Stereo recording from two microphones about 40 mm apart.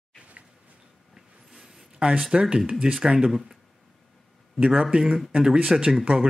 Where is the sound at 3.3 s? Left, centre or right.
Centre.